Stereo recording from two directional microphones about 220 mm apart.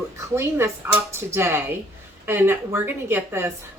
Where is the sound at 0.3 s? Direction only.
10° right (ahead or behind).